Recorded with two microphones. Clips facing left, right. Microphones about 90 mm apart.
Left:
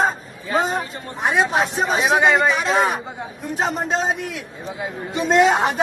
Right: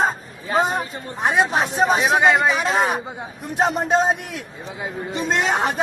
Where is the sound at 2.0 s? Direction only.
Centre (ahead or behind).